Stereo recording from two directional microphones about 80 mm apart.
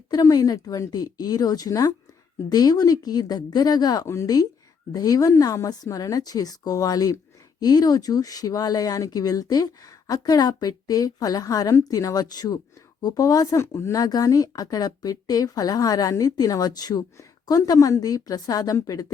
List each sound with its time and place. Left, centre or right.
0.1 s speech: left
4.0 s speech: left
4.9 s speech: left